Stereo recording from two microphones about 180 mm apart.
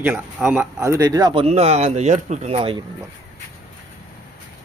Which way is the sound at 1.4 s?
35° right (ahead or behind).